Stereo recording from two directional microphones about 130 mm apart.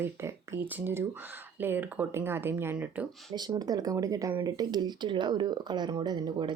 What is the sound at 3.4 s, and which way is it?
Speech, 30° right (ahead or behind).